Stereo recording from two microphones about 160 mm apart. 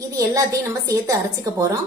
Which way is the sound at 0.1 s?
20° right (ahead or behind).